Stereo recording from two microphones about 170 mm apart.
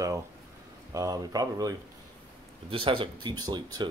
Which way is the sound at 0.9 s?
20° right (ahead or behind).